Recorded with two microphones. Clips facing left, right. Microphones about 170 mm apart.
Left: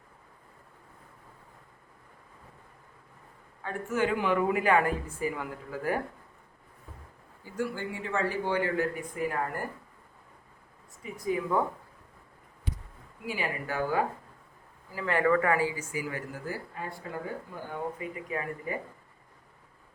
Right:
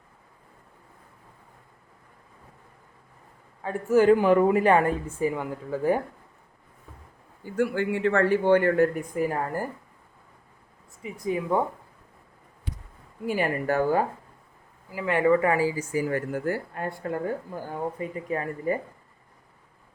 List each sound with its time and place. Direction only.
3.6 s speech: 35° right (ahead or behind)
7.4 s speech: 65° right (ahead or behind)
11.0 s speech: 25° right (ahead or behind)
13.2 s speech: 50° right (ahead or behind)
14.8 s speech: 15° right (ahead or behind)
15.7 s speech: 40° right (ahead or behind)
18.3 s speech: 40° right (ahead or behind)